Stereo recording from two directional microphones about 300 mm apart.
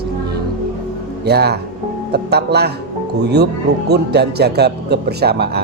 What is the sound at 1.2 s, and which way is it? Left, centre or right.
A man's voice, right.